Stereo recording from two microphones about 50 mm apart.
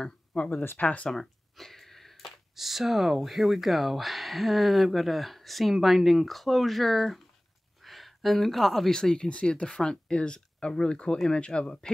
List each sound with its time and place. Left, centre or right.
0.0 s speech: centre
1.1 s speech: centre